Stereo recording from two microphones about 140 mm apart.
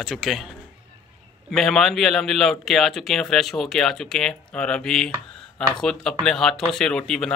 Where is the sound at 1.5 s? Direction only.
Centre (ahead or behind).